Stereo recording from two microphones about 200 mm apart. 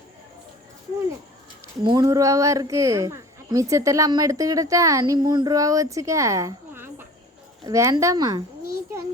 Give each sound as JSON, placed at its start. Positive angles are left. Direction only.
{"t": 1.8, "sound": "speech", "side_deg": -20}